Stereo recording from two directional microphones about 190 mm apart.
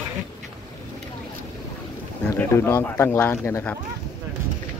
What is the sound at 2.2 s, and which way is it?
Speech, 10° left (ahead or behind).